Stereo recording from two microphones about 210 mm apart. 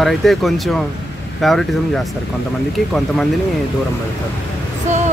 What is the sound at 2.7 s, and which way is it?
Speech, centre (ahead or behind).